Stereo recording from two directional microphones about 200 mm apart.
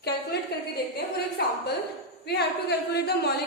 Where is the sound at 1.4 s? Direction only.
50° left (ahead or behind).